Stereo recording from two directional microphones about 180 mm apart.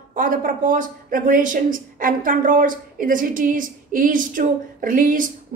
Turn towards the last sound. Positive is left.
turn(degrees=-50)  # may be behind; listen again after turning